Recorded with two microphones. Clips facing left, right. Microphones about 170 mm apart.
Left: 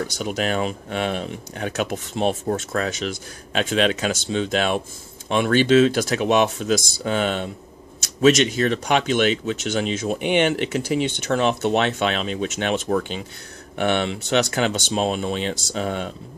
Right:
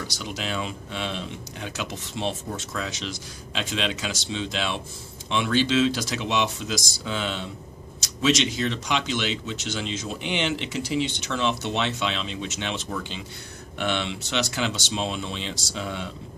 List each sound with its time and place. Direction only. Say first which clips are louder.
0.0 s speech: left 8 dB; 55° left (ahead or behind)